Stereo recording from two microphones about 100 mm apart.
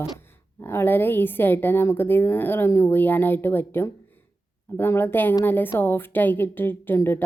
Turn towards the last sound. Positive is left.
turn(degrees=25)  # may be behind; listen again after turning